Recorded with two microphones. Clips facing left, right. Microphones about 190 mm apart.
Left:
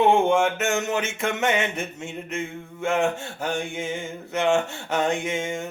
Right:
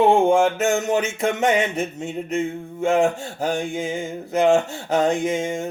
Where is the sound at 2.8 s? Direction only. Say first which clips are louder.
Right 5 dB; 35° right (ahead or behind).